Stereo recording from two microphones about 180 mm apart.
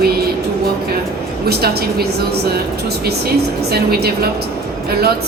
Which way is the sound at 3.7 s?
60° right (ahead or behind).